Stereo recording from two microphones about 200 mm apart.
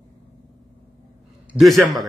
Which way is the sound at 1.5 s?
Centre (ahead or behind).